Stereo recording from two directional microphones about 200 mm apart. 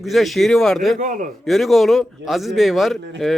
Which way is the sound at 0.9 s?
40° right (ahead or behind).